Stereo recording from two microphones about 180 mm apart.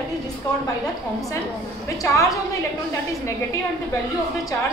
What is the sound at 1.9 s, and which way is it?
Speech, 20° left (ahead or behind).